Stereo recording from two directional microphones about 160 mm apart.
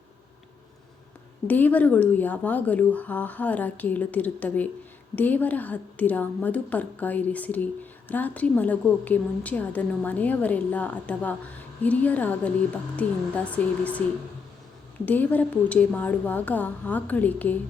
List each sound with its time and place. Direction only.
1.5 s a woman's voice: 10° left (ahead or behind)
15.0 s a woman's voice: 10° left (ahead or behind)